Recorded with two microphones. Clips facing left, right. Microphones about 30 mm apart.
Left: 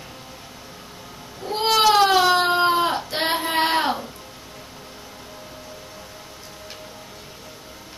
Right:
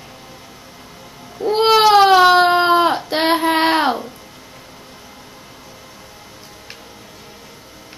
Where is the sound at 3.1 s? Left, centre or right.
Right.